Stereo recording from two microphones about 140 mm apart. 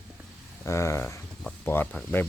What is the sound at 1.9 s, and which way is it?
Speech, 5° left (ahead or behind).